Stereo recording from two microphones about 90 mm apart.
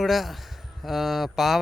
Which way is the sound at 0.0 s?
Centre (ahead or behind).